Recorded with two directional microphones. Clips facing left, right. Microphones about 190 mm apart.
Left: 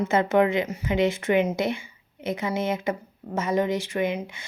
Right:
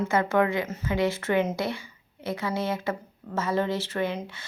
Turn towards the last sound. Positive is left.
turn(degrees=15)  # may be behind; listen again after turning